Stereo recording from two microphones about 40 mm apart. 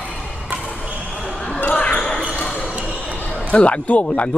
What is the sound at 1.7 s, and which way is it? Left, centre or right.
Basketball bounce, left.